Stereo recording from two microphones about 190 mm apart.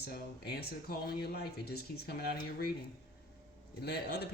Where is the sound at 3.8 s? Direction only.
55° left (ahead or behind).